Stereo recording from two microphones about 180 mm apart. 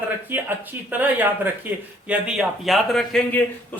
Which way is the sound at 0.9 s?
10° right (ahead or behind).